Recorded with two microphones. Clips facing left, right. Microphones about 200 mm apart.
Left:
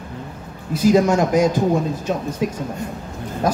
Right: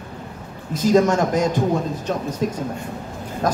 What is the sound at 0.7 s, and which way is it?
Speech, 10° left (ahead or behind).